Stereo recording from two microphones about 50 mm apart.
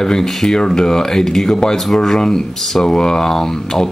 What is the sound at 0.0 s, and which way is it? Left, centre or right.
Speech, centre.